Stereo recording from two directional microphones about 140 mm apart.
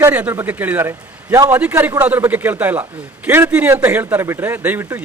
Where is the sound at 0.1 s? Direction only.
10° right (ahead or behind).